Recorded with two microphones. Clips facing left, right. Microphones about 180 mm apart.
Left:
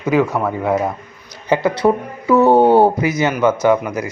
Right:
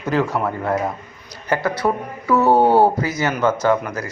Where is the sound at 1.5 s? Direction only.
20° left (ahead or behind).